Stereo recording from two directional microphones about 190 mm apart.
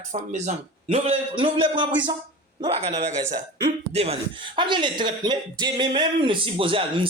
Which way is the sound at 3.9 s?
30° right (ahead or behind).